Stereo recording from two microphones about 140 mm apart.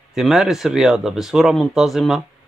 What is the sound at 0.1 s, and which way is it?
A man's voice, centre (ahead or behind).